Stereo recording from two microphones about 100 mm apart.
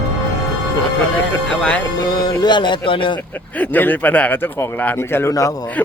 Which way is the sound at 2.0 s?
45° left (ahead or behind).